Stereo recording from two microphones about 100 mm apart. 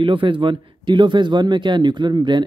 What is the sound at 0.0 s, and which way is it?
Speech, 55° right (ahead or behind).